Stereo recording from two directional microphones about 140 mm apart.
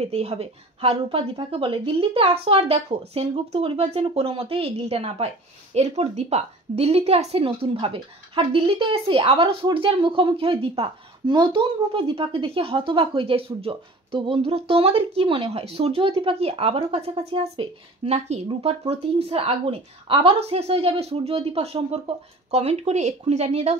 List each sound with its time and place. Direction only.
0.0 s a woman's voice: 45° right (ahead or behind)